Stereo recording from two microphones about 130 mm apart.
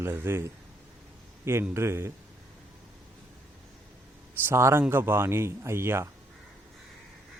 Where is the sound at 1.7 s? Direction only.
20° right (ahead or behind).